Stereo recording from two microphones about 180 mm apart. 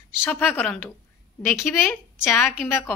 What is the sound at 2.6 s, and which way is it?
Speech, 15° left (ahead or behind).